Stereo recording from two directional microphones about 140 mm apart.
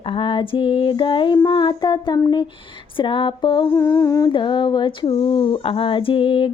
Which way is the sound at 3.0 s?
35° left (ahead or behind).